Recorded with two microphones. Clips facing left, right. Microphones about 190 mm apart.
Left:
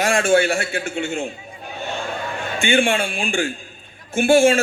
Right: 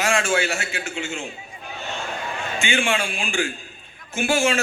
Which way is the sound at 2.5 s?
55° left (ahead or behind).